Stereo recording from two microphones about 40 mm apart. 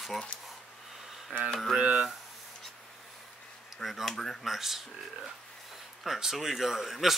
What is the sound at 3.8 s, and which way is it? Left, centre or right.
Speech, centre.